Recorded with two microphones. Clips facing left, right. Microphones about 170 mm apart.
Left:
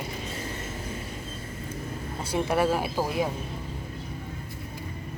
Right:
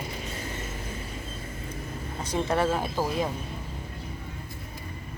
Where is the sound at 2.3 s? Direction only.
10° left (ahead or behind).